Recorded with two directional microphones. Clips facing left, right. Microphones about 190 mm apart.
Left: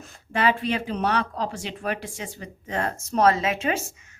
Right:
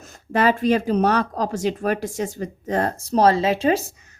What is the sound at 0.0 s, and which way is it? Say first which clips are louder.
A woman's voice: right 4 dB; 40° right (ahead or behind).